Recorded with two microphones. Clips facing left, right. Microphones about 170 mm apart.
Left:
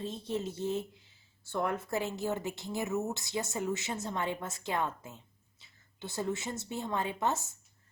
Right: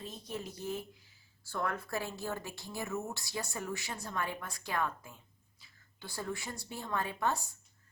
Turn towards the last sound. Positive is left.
turn(degrees=20)  # may be behind; listen again after turning